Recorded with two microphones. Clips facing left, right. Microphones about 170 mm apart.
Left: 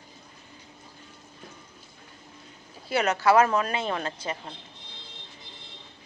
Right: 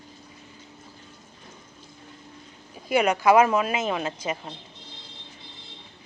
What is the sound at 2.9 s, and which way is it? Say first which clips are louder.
Speech: right 3 dB; 15° right (ahead or behind).